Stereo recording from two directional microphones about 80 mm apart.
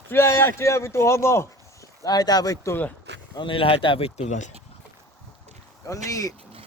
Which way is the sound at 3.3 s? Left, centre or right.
Left.